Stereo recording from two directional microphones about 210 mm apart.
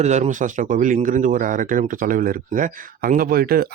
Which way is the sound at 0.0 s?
35° right (ahead or behind).